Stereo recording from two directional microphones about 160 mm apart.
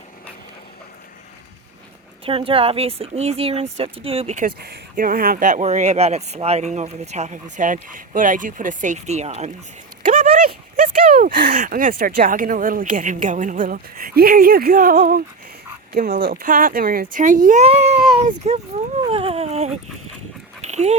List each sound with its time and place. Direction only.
2.2 s speech: 35° right (ahead or behind)
4.6 s speech: 70° right (ahead or behind); by 9.5 s 45° right (ahead or behind)
10.8 s speech: 55° right (ahead or behind)
20.6 s dog: 45° right (ahead or behind)